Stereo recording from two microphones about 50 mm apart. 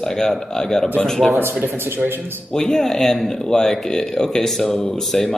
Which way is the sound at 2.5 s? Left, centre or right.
Centre.